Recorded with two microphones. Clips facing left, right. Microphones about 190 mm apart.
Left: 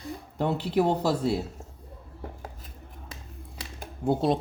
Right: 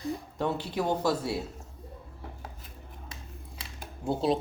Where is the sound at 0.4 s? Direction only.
65° left (ahead or behind).